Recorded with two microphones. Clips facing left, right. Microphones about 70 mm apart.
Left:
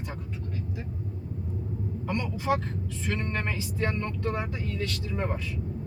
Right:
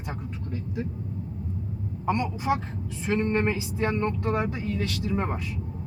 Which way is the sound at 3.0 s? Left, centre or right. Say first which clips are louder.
Right 8 dB; right.